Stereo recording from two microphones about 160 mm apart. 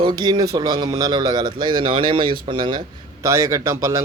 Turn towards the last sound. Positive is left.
turn(degrees=-20)  # may be behind; listen again after turning